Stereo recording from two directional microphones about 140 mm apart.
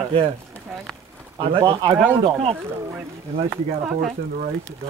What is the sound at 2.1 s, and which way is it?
Speech, 40° right (ahead or behind).